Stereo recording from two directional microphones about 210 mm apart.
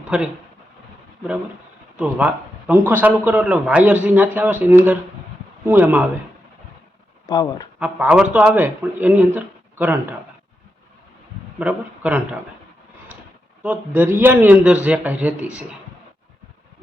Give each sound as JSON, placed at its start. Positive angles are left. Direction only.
{"t": 0.1, "sound": "speech", "side_deg": -5}
{"t": 2.0, "sound": "speech", "side_deg": -5}
{"t": 7.3, "sound": "speech", "side_deg": 20}
{"t": 7.8, "sound": "speech", "side_deg": -5}
{"t": 11.6, "sound": "speech", "side_deg": -5}
{"t": 13.6, "sound": "speech", "side_deg": -5}